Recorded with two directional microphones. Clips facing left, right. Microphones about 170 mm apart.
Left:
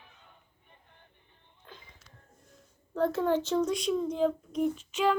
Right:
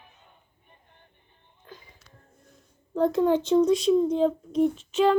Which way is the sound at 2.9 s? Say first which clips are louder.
Right 5 dB; 15° right (ahead or behind).